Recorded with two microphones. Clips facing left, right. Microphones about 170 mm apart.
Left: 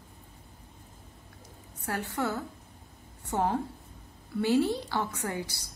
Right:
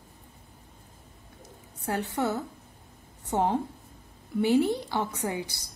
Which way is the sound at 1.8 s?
25° right (ahead or behind).